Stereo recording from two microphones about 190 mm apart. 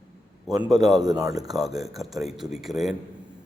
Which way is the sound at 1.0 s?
20° right (ahead or behind).